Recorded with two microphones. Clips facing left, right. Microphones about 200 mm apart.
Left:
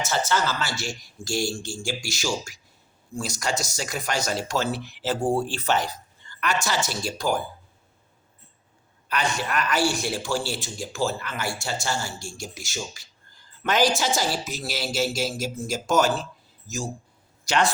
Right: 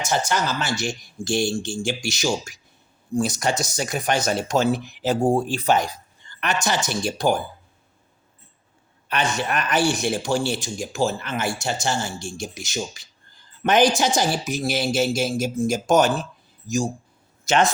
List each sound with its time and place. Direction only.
0.0 s a man's voice: 15° right (ahead or behind)
9.0 s a man's voice: 25° right (ahead or behind)